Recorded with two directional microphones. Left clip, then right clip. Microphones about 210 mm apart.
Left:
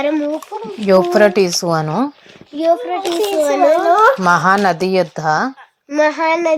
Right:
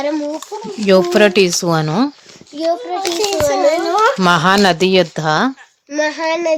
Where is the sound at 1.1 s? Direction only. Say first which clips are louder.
Even; 35° right (ahead or behind).